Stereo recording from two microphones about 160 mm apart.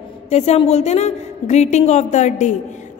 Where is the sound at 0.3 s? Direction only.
40° left (ahead or behind).